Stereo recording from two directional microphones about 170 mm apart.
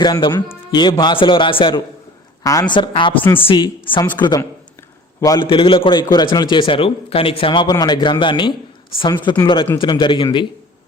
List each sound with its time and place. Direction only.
0.0 s speech: 25° left (ahead or behind)